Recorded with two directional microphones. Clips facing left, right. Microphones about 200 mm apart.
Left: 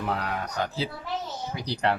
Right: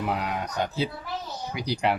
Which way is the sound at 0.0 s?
15° right (ahead or behind).